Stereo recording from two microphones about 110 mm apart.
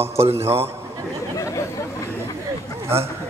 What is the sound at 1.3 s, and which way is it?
Chatter, 30° left (ahead or behind).